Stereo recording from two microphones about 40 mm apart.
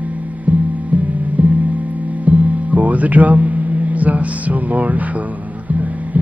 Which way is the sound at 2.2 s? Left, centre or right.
Right.